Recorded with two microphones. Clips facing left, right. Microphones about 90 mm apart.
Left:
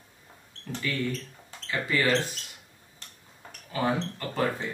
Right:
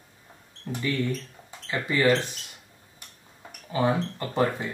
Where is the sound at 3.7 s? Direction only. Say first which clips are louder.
Right 3 dB; 25° right (ahead or behind).